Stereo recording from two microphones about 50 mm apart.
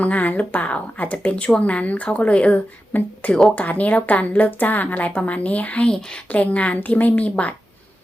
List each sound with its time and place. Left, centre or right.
0.0 s a woman's voice: left
2.9 s a woman's voice: left
5.8 s speech: centre
6.3 s a woman's voice: left